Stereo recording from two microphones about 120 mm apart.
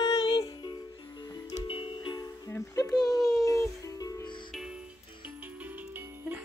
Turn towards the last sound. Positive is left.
turn(degrees=-15)  # may be behind; listen again after turning